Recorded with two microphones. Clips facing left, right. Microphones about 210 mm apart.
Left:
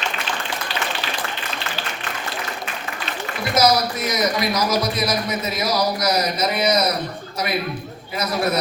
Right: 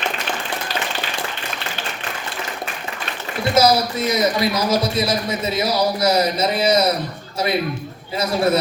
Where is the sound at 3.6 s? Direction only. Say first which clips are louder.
Right 2 dB; 25° right (ahead or behind).